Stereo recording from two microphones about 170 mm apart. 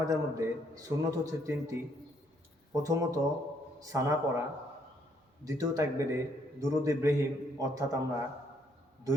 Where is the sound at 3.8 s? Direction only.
20° right (ahead or behind).